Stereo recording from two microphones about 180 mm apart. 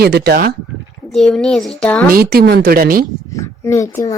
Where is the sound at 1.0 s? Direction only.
Centre (ahead or behind).